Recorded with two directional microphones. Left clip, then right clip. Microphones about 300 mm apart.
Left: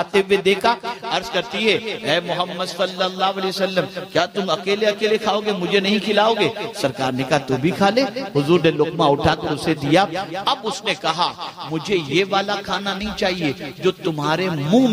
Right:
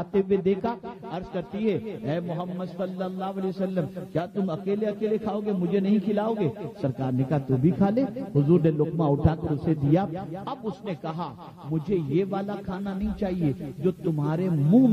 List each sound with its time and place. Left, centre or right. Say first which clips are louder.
0.1 s a man's voice: left 6 dB; centre
8.9 s a man's voice: left 9 dB; left
9.4 s a man's voice: left 7 dB; centre